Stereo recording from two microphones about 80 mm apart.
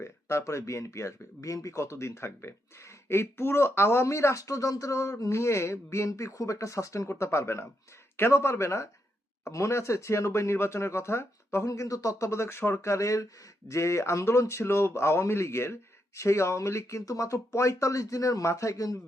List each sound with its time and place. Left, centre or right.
0.0 s speech: left